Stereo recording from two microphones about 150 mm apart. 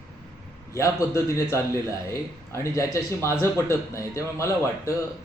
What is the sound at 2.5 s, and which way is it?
Speech, 20° left (ahead or behind).